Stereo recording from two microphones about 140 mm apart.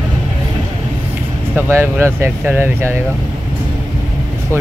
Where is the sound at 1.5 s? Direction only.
15° right (ahead or behind).